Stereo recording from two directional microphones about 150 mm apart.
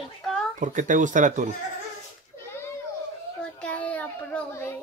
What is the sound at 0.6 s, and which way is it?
Speech, 55° right (ahead or behind).